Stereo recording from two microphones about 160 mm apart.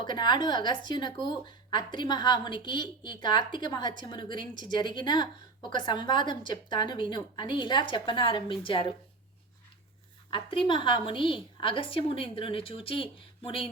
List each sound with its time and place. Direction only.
0.0 s speech: 30° left (ahead or behind)
10.2 s a woman's voice: 35° left (ahead or behind)